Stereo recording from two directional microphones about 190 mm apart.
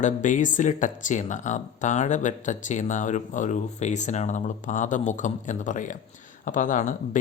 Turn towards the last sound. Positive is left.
turn(degrees=40)  # may be behind; listen again after turning